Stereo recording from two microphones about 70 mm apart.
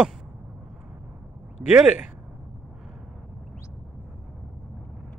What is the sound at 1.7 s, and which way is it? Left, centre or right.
Speech, centre.